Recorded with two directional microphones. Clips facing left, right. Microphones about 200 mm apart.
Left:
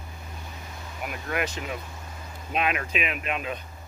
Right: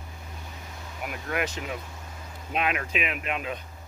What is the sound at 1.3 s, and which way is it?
Speech, 5° right (ahead or behind).